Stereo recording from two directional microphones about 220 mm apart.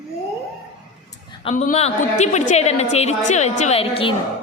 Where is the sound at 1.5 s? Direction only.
30° left (ahead or behind).